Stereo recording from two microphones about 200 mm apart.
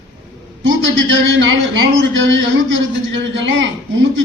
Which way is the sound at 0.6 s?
70° right (ahead or behind).